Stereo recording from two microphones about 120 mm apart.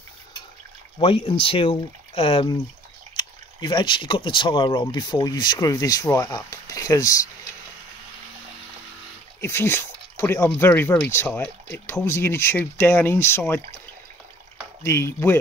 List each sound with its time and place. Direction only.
0.9 s speech: 45° left (ahead or behind)
3.2 s speech: 40° left (ahead or behind)
9.4 s speech: 20° left (ahead or behind)
14.8 s speech: 20° left (ahead or behind)